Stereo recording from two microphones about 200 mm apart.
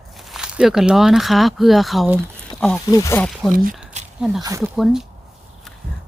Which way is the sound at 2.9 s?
15° left (ahead or behind).